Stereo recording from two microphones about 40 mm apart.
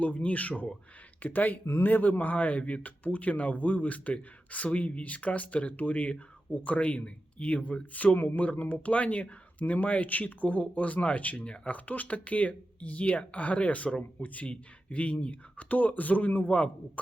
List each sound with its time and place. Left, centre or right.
0.0 s speech: left
8.1 s speech: left
8.4 s speech: left
11.4 s speech: left
11.7 s speech: left